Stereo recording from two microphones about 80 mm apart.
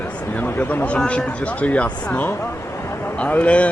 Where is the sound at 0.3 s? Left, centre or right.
Left.